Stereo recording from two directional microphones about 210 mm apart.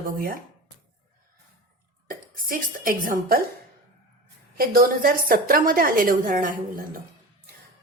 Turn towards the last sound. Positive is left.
turn(degrees=-40)  # may be behind; listen again after turning